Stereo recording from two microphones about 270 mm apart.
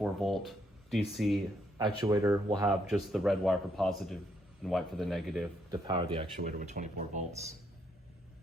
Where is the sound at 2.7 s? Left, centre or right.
Centre.